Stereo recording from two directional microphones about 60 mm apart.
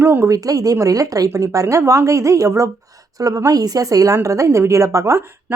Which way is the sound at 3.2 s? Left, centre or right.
Right.